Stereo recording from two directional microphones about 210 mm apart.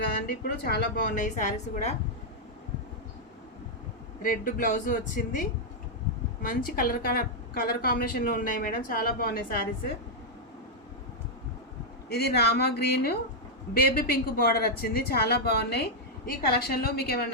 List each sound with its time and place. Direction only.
0.1 s a woman's voice: 45° left (ahead or behind)
4.2 s a woman's voice: 40° left (ahead or behind)
12.0 s a woman's voice: 50° left (ahead or behind)